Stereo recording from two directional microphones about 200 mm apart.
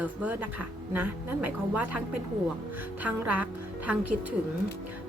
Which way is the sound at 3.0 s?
5° right (ahead or behind).